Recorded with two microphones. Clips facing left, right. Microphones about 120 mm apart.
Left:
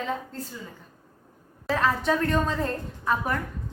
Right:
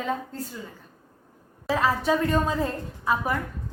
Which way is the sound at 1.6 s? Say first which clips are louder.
Right 1 dB; 5° right (ahead or behind).